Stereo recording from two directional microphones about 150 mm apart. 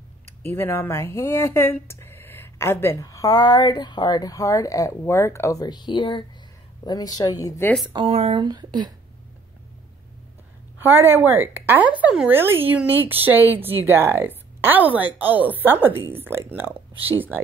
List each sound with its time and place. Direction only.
0.4 s speech: 15° left (ahead or behind)
7.9 s speech: 40° right (ahead or behind)
10.8 s a woman's voice: 15° right (ahead or behind)